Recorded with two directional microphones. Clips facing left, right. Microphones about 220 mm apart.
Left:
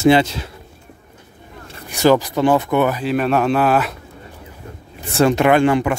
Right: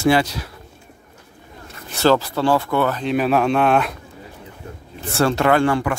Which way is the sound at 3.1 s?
Centre (ahead or behind).